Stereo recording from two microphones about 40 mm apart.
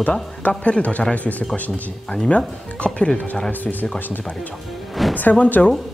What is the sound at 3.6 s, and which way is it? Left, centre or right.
Speech, left.